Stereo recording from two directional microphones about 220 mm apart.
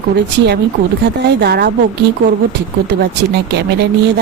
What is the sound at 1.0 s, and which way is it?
Speech, 50° right (ahead or behind).